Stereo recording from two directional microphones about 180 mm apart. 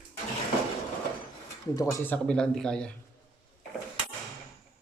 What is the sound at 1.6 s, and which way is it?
A man's voice, 20° left (ahead or behind).